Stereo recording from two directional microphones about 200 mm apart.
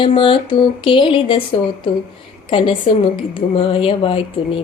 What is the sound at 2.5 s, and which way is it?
Speech, 25° left (ahead or behind).